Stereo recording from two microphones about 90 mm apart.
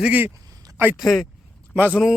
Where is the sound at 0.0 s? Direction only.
15° right (ahead or behind).